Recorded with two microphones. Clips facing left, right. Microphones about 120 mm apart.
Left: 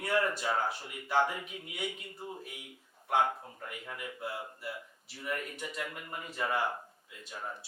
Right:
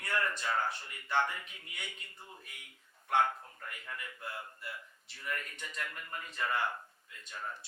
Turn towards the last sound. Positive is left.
turn(degrees=10)  # may be behind; listen again after turning